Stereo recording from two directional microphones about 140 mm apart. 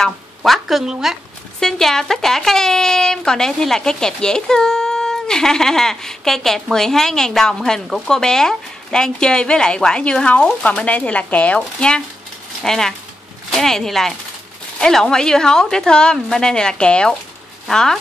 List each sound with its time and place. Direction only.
0.0 s a woman's voice: centre (ahead or behind)